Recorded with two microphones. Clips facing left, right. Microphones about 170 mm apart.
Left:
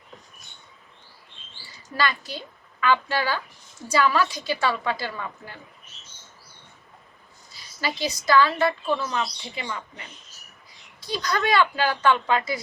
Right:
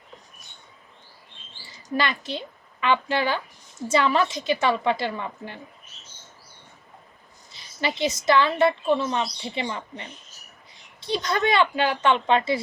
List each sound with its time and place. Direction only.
1.9 s speech: 20° right (ahead or behind)
7.5 s speech: 25° right (ahead or behind)